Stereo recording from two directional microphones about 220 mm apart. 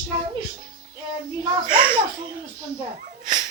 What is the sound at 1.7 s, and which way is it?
Speech, 40° right (ahead or behind).